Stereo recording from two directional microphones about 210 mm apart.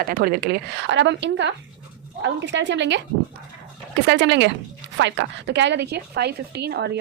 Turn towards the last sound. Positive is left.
turn(degrees=-50)  # may be behind; listen again after turning